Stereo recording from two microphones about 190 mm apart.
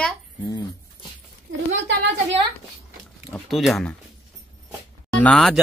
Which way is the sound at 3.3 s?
Centre (ahead or behind).